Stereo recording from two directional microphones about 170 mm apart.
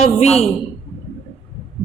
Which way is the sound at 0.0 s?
40° left (ahead or behind).